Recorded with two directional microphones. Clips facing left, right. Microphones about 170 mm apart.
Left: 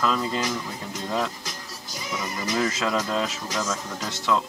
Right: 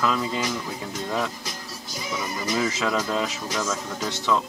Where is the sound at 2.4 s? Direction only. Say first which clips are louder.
Even; 5° right (ahead or behind).